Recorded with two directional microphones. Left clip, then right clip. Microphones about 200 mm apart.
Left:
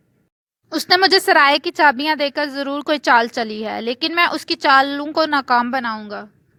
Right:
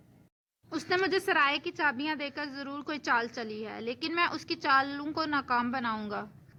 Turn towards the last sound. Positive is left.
turn(degrees=30)  # may be behind; listen again after turning